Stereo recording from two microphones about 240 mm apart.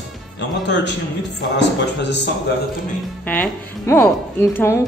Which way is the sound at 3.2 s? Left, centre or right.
Centre.